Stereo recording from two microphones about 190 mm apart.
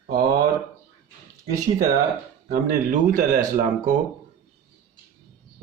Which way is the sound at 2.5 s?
45° right (ahead or behind).